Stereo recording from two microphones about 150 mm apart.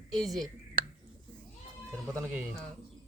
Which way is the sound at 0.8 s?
70° right (ahead or behind).